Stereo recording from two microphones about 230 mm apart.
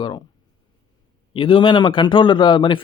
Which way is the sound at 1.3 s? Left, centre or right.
Left.